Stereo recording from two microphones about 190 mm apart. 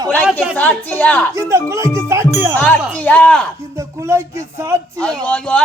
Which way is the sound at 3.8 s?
15° right (ahead or behind).